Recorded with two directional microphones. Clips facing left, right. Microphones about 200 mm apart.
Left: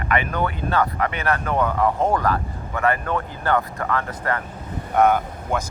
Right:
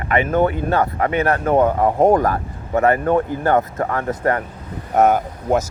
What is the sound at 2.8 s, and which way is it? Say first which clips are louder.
A man's voice: right 6 dB; 20° right (ahead or behind).